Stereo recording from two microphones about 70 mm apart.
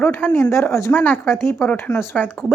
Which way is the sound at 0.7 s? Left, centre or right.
Left.